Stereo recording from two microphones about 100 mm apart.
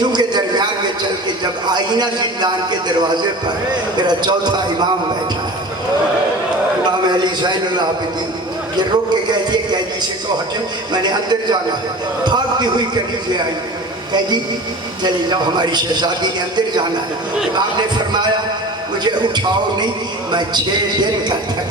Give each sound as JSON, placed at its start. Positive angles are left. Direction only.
{"t": 0.1, "sound": "a sound", "side_deg": -45}
{"t": 1.6, "sound": "a man's voice", "side_deg": -45}
{"t": 7.1, "sound": "a man's voice", "side_deg": -45}
{"t": 9.3, "sound": "a man's voice", "side_deg": -45}
{"t": 10.9, "sound": "a man's voice", "side_deg": -45}
{"t": 15.0, "sound": "a man's voice", "side_deg": -45}